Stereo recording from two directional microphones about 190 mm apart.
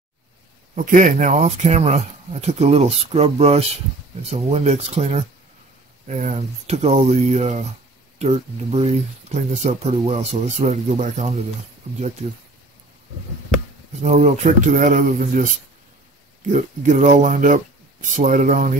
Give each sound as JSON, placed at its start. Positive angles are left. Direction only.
{"t": 0.7, "sound": "speech", "side_deg": -45}
{"t": 14.0, "sound": "speech", "side_deg": -35}
{"t": 16.5, "sound": "speech", "side_deg": -40}